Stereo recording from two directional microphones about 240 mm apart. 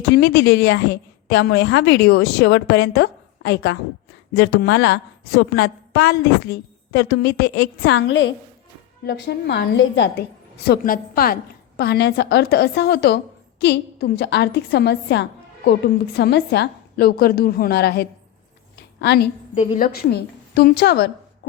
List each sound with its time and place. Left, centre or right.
0.1 s a woman's voice: left
19.5 s a woman's voice: left